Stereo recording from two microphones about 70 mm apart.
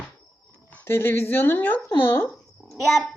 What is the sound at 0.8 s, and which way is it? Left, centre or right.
Speech, left.